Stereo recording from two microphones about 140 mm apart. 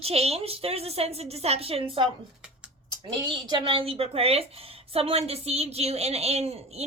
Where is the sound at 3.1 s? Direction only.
30° right (ahead or behind).